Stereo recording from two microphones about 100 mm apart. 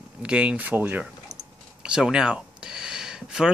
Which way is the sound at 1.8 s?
5° right (ahead or behind).